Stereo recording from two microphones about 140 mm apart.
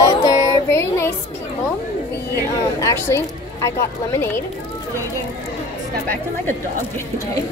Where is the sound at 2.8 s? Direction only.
20° left (ahead or behind).